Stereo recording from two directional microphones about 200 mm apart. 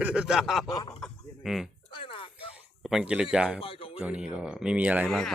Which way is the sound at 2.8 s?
5° right (ahead or behind).